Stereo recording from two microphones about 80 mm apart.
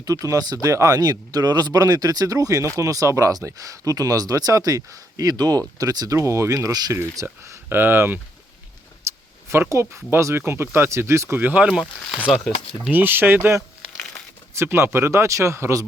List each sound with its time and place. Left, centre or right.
0.0 s speech: right
6.1 s speech: right
9.1 s a sound: right
9.5 s speech: right
11.3 s speech: centre
11.7 s speech: centre
12.9 s speech: right